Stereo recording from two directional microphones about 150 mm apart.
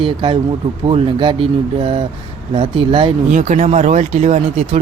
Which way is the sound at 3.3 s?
55° right (ahead or behind).